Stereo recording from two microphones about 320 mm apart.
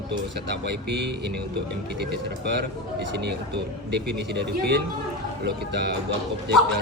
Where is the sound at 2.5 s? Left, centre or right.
Right.